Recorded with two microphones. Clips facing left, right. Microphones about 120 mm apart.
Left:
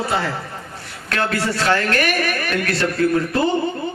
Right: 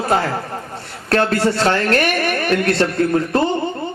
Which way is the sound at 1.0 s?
35° right (ahead or behind).